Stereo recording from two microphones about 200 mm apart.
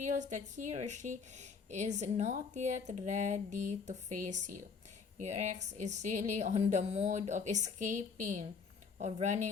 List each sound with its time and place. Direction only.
0.0 s speech: 35° right (ahead or behind)